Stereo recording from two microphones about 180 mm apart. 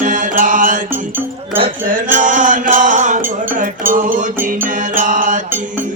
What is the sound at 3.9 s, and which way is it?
Music, 50° right (ahead or behind).